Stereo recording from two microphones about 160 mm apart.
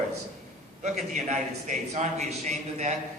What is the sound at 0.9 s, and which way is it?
A man's voice, 45° right (ahead or behind).